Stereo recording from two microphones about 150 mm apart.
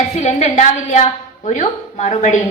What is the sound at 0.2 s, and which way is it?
A woman's voice, 50° left (ahead or behind).